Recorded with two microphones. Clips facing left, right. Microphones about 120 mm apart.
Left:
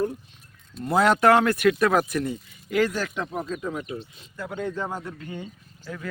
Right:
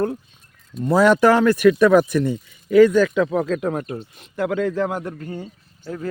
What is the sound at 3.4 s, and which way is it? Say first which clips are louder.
Speech: right 8 dB; 80° right.